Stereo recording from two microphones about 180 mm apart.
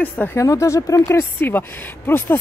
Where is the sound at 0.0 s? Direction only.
10° left (ahead or behind).